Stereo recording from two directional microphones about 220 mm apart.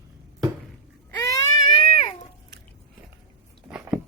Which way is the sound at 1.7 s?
25° left (ahead or behind).